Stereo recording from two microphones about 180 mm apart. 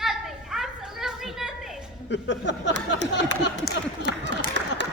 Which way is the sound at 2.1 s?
80° left.